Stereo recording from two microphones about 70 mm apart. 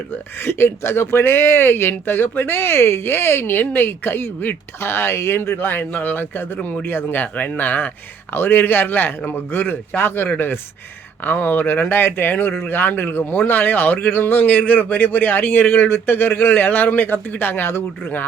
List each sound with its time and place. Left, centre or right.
0.4 s speech: left